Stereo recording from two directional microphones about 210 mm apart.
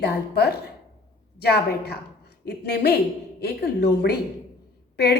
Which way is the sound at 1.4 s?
50° left (ahead or behind).